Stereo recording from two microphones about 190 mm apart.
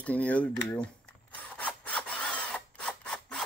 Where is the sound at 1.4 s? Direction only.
5° left (ahead or behind).